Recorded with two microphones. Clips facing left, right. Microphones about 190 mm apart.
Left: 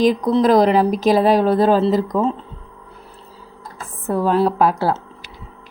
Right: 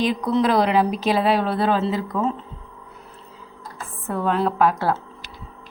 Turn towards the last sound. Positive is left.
turn(degrees=30)  # may be behind; listen again after turning